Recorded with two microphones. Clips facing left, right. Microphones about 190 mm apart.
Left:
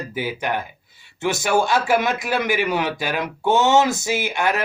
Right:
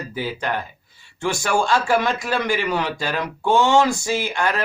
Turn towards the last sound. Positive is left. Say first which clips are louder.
# left 1 dB
turn(degrees=20)  # may be behind; listen again after turning